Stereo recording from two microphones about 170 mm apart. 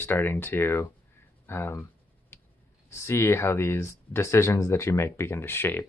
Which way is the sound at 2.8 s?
15° left (ahead or behind).